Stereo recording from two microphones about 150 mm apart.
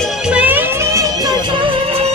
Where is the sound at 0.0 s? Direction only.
5° right (ahead or behind).